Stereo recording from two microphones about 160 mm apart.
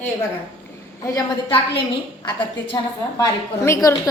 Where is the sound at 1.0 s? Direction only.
25° left (ahead or behind).